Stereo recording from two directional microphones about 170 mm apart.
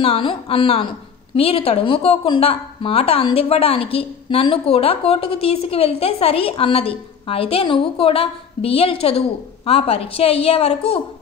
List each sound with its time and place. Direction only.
0.0 s a woman's voice: 35° left (ahead or behind)